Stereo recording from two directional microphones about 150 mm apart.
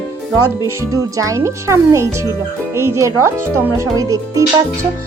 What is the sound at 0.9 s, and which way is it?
Speech, 20° right (ahead or behind).